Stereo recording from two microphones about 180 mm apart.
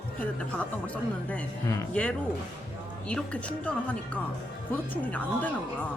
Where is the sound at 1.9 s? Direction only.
5° left (ahead or behind).